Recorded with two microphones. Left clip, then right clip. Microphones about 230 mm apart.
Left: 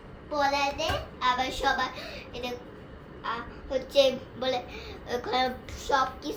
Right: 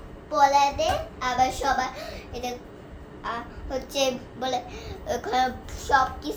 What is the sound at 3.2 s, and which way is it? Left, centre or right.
A child's voice, centre.